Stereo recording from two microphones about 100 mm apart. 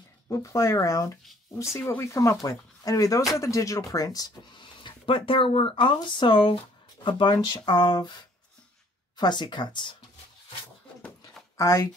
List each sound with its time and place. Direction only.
0.3 s speech: 30° left (ahead or behind)
4.6 s speech: 55° left (ahead or behind)
9.1 s speech: 45° left (ahead or behind)
11.5 s speech: 35° left (ahead or behind)